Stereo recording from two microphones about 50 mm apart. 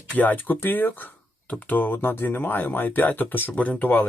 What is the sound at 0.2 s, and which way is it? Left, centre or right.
Speech, left.